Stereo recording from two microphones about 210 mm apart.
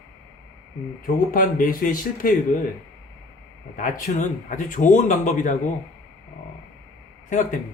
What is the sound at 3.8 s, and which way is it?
Speech, 35° left (ahead or behind).